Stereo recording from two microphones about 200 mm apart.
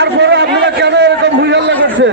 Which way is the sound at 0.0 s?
55° right (ahead or behind).